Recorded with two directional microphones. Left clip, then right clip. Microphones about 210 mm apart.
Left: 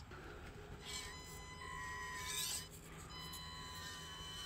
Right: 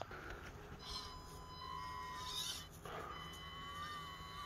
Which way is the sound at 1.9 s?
10° left (ahead or behind).